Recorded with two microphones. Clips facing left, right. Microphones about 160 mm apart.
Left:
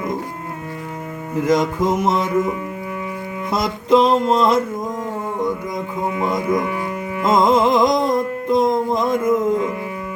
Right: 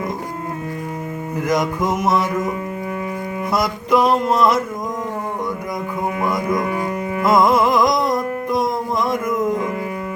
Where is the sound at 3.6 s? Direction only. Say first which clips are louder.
Left 2 dB; 25° left (ahead or behind).